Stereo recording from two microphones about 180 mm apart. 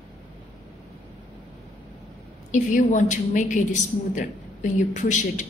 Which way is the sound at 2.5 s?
45° left (ahead or behind).